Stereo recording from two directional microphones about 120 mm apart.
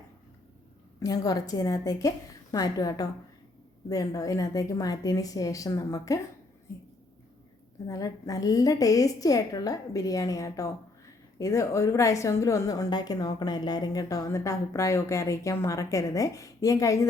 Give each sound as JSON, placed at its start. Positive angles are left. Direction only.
{"t": 0.9, "sound": "a woman's voice", "side_deg": 30}
{"t": 7.9, "sound": "a woman's voice", "side_deg": 30}